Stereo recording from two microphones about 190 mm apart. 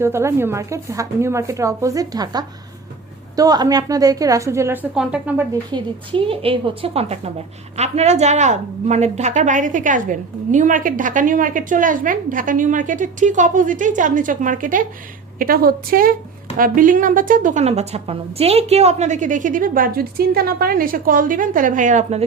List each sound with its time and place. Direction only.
0.0 s speech: 15° right (ahead or behind)
5.7 s a woman's voice: 30° right (ahead or behind)